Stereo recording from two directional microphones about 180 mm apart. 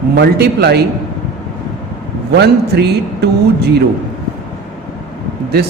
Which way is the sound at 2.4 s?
65° right (ahead or behind).